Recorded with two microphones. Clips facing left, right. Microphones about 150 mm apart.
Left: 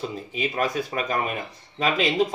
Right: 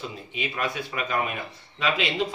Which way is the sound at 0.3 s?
40° left (ahead or behind).